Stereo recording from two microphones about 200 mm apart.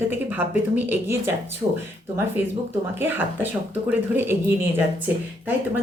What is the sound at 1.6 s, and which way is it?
Speech, 25° right (ahead or behind).